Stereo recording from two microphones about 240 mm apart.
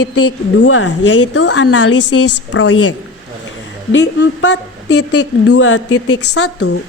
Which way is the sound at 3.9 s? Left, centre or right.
Left.